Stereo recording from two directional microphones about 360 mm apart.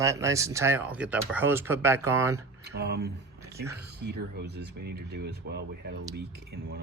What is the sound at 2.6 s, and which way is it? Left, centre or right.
Speech, right.